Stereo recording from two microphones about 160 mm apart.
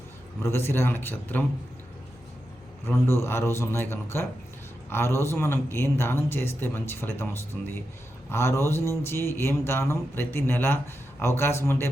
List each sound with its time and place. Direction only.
0.4 s a man's voice: 15° left (ahead or behind)
2.8 s a man's voice: 15° left (ahead or behind)
8.3 s a man's voice: 15° left (ahead or behind)